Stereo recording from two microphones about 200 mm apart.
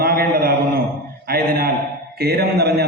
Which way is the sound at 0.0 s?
50° right (ahead or behind).